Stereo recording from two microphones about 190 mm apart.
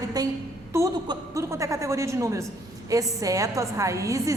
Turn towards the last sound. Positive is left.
turn(degrees=-15)  # may be behind; listen again after turning